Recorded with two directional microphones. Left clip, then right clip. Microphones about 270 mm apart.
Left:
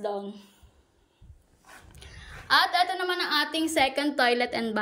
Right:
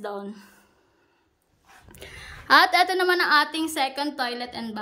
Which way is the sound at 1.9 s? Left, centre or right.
Right.